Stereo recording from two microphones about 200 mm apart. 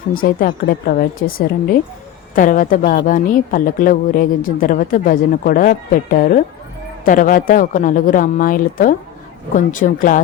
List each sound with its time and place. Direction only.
0.1 s a woman's voice: 45° left (ahead or behind)
2.3 s a woman's voice: 40° left (ahead or behind)